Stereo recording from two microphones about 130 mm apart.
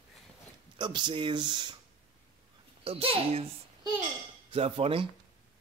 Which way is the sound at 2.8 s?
50° right (ahead or behind).